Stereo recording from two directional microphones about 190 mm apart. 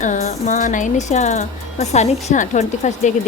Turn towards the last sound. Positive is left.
turn(degrees=40)  # may be behind; listen again after turning